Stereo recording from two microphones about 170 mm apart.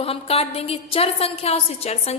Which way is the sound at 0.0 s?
35° left (ahead or behind).